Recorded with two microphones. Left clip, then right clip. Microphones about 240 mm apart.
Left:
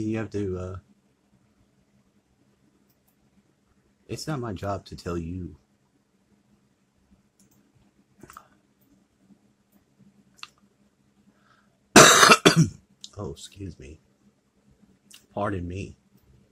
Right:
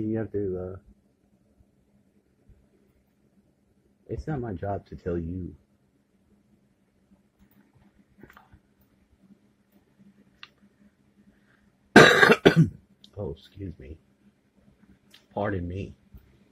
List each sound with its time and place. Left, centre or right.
0.2 s speech: left
4.1 s speech: centre
11.9 s throat clearing: centre
15.0 s speech: centre